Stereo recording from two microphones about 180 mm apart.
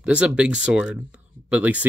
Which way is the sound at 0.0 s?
5° right (ahead or behind).